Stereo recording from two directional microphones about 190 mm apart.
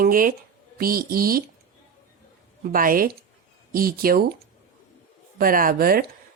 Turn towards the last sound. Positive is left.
turn(degrees=-50)  # may be behind; listen again after turning